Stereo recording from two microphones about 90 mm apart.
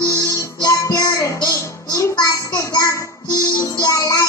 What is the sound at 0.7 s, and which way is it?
Music, 35° left (ahead or behind).